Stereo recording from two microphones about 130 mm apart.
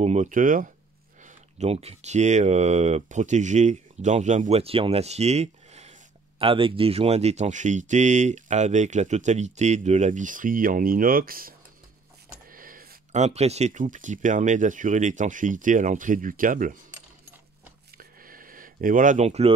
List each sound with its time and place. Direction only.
0.0 s speech: 65° right (ahead or behind); by 0.7 s 90° right
1.2 s speech: 55° right (ahead or behind)
6.4 s speech: 45° right (ahead or behind); by 16.7 s 90° right
18.2 s a sound: 90° right
19.2 s speech: 55° right (ahead or behind)